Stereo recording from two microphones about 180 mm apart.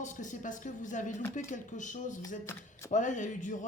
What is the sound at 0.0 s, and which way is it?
Speech, 45° left (ahead or behind).